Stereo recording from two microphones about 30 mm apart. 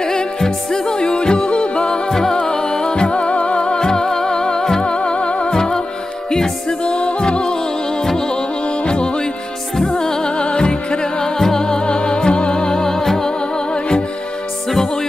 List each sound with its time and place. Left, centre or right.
0.0 s music: left
2.0 s music: centre; by 3.3 s left
3.3 s music: left
3.8 s music: left
5.5 s music: left
6.8 s music: left
8.0 s music: centre
8.8 s music: left
10.3 s music: left; by 13.3 s centre